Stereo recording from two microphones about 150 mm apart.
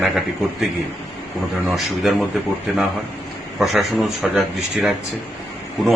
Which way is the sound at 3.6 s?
Centre (ahead or behind).